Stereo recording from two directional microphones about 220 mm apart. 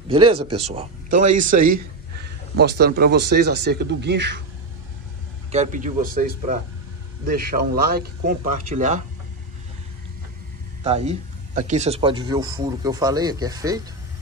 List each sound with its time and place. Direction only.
0.1 s speech: 25° right (ahead or behind); by 4.4 s 50° right (ahead or behind)
5.5 s speech: 35° right (ahead or behind)
10.8 s speech: 30° right (ahead or behind)